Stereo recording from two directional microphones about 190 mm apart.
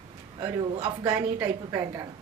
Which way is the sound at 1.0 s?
10° right (ahead or behind).